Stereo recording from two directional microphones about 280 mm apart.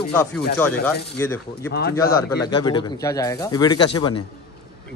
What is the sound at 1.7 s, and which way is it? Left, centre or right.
Speech, left.